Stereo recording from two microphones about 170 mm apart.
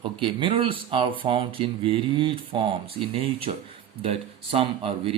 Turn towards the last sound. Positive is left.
turn(degrees=-35)  # may be behind; listen again after turning